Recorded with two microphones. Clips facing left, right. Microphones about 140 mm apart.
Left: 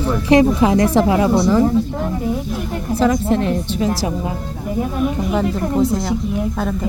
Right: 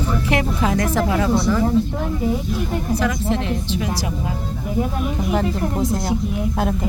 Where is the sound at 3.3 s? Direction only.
45° left (ahead or behind).